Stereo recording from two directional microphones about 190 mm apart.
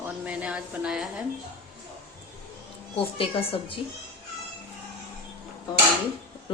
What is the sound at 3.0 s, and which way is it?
Speech, 30° left (ahead or behind).